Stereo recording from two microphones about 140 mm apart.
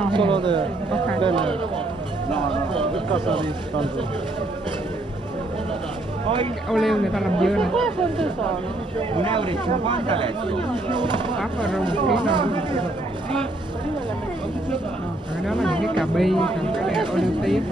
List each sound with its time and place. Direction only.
0.1 s a man's voice: 35° right (ahead or behind)
6.2 s speech: 40° right (ahead or behind)
6.7 s speech: centre (ahead or behind)
9.1 s speech: 35° right (ahead or behind)
16.0 s speech: centre (ahead or behind)